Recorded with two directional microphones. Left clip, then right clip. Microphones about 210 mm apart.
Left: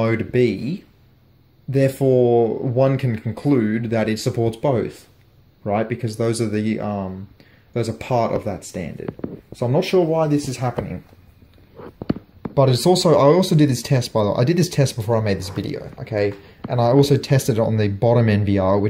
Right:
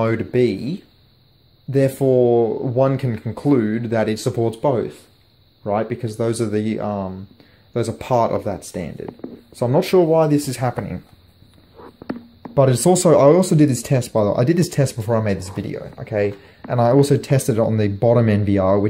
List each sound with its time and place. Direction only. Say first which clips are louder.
0.0 s speech: right 1 dB; 10° right (ahead or behind)
12.5 s speech: right 1 dB; 10° right (ahead or behind)